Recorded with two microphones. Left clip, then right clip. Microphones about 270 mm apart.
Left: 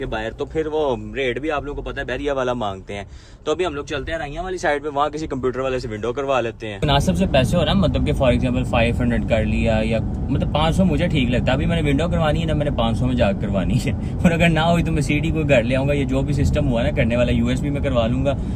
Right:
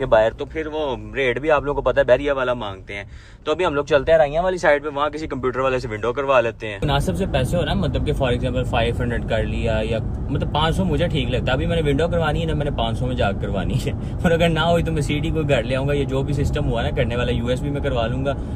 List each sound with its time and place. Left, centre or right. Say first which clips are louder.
0.1 s speech: right 11 dB; centre
0.5 s speech: left 4 dB; centre
1.2 s speech: right 6 dB; centre
3.6 s speech: right 6 dB; centre
4.6 s speech: left 2 dB; centre